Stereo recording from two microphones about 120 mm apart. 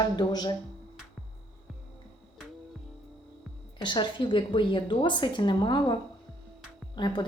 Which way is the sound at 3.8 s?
40° left (ahead or behind).